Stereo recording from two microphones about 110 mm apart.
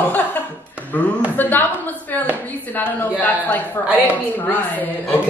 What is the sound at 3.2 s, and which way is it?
Speech, 15° left (ahead or behind).